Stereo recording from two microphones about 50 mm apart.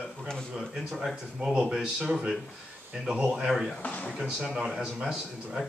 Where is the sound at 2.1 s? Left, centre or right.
Centre.